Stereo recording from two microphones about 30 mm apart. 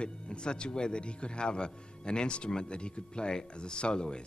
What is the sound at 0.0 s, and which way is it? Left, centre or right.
Speech, left.